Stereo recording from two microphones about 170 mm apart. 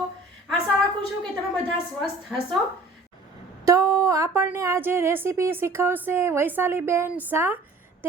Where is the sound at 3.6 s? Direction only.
20° right (ahead or behind).